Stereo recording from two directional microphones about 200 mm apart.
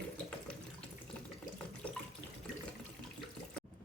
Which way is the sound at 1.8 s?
5° left (ahead or behind).